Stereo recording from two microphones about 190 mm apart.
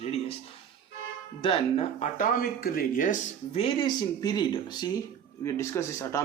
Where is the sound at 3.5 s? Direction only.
30° left (ahead or behind).